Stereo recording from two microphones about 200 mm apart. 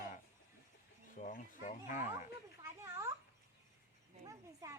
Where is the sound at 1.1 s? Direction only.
40° left (ahead or behind).